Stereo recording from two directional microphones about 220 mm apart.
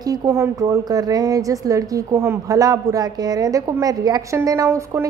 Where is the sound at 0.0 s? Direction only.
15° right (ahead or behind).